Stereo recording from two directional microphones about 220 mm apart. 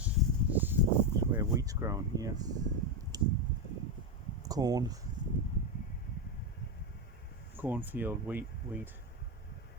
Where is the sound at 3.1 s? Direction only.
15° right (ahead or behind).